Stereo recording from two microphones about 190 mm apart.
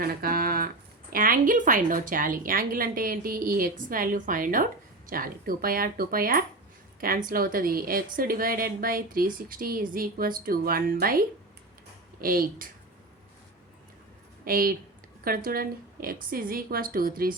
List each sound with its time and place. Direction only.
0.0 s a sound: 50° right (ahead or behind)
1.1 s a woman's voice: 45° right (ahead or behind)
14.4 s a woman's voice: 50° right (ahead or behind)